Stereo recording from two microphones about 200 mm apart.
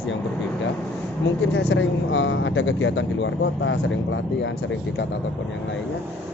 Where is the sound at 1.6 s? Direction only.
65° left (ahead or behind).